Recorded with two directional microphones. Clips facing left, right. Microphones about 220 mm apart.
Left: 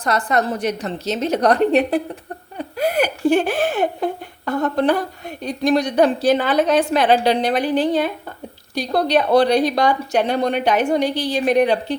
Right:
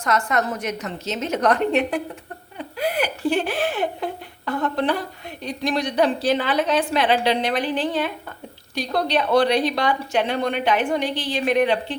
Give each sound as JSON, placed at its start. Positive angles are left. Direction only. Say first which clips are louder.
{"t": 0.0, "sound": "speech", "louder": "left 3 dB", "side_deg": 35}